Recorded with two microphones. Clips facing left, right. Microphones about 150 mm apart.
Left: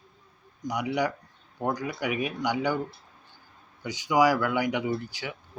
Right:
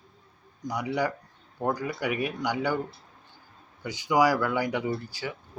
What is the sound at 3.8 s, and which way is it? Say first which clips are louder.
Speech: left 1 dB; 15° left (ahead or behind).